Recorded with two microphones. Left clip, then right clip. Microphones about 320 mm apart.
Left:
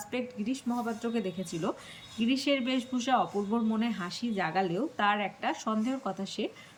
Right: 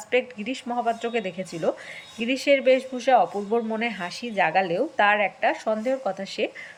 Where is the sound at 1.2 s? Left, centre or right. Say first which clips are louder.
Right 6 dB; centre.